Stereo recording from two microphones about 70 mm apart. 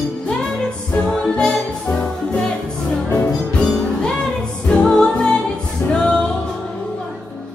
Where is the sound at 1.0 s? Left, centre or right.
Centre.